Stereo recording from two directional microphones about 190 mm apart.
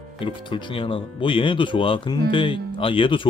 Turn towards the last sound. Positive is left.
turn(degrees=25)  # may be behind; listen again after turning